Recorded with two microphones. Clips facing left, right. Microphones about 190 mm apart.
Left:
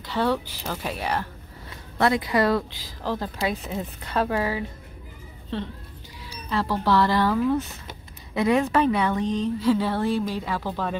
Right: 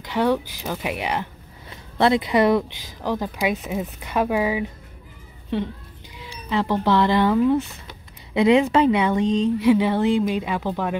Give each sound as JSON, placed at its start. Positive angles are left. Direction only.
{"t": 0.0, "sound": "speech", "side_deg": -15}